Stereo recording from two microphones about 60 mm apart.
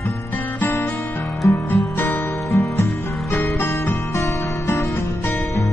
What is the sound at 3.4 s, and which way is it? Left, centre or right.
Music, left.